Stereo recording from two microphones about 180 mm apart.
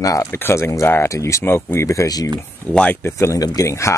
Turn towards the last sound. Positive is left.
turn(degrees=15)  # may be behind; listen again after turning